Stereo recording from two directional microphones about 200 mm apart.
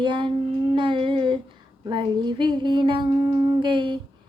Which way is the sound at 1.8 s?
20° right (ahead or behind).